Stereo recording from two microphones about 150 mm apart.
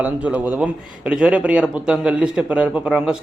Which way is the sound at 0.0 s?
10° right (ahead or behind).